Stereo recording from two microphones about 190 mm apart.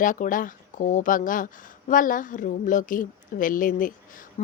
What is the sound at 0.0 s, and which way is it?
A woman's voice, 45° left (ahead or behind).